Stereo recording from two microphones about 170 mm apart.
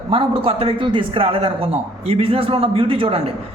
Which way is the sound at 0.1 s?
35° right (ahead or behind).